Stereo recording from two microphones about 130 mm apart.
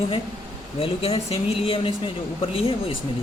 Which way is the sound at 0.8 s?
50° left (ahead or behind).